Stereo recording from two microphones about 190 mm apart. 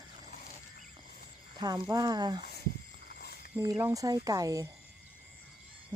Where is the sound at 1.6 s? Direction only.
20° right (ahead or behind).